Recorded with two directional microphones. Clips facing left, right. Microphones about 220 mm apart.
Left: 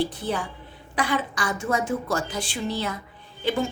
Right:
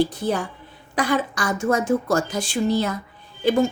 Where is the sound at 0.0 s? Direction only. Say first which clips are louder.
Right 5 dB; 45° right (ahead or behind).